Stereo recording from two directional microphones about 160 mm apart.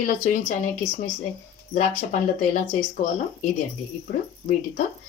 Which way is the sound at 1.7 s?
50° left (ahead or behind).